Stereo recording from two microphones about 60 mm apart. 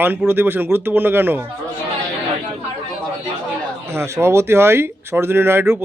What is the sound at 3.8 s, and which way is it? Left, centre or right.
Speech, right.